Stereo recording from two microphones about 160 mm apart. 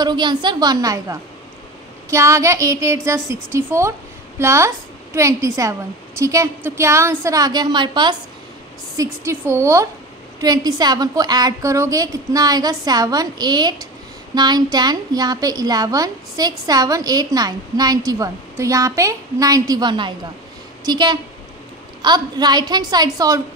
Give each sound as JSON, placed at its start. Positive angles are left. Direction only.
{"t": 0.0, "sound": "a woman's voice", "side_deg": -25}